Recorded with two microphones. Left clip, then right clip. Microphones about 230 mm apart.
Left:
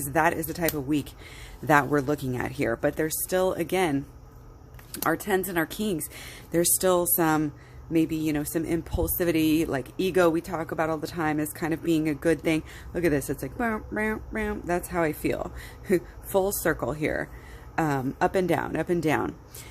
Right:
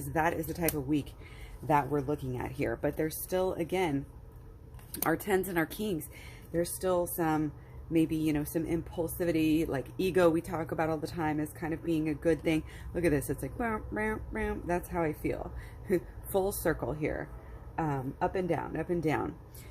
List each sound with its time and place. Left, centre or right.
0.1 s speech: left
1.6 s speech: left
4.9 s speech: centre
6.1 s speech: left
7.9 s speech: centre
15.9 s speech: centre
17.7 s speech: left